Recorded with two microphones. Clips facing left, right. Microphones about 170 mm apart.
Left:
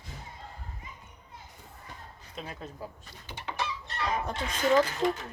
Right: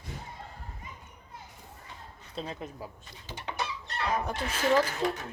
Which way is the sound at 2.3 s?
30° right (ahead or behind).